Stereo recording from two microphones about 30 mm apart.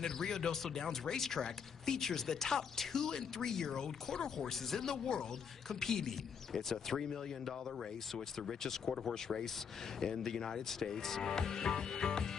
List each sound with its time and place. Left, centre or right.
0.0 s a man's voice: centre